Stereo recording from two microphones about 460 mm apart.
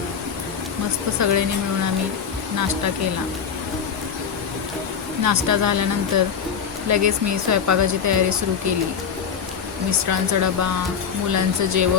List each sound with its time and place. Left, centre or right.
1.2 s speech: right
5.2 s speech: right
10.1 s speech: right